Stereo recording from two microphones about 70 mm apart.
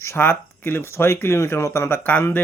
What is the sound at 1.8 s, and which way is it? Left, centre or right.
Speech, left.